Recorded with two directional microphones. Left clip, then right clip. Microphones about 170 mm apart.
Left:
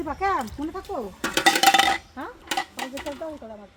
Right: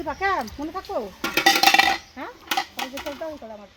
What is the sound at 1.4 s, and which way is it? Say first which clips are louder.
Dishes: right 1 dB; 5° left (ahead or behind).